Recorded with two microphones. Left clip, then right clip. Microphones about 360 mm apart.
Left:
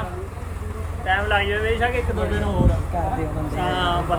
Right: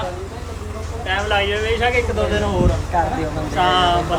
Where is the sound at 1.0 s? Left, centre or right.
Right.